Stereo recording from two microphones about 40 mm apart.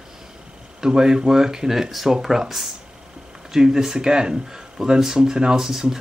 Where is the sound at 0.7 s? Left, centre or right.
Centre.